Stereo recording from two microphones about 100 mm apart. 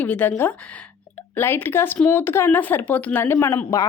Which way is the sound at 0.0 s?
15° left (ahead or behind).